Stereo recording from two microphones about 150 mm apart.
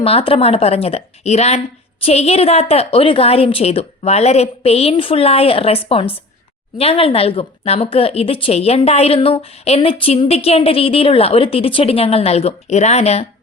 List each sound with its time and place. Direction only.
0.0 s a woman's voice: 40° left (ahead or behind)